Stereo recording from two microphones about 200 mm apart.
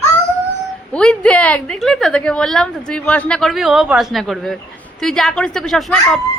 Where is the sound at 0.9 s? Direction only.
5° left (ahead or behind).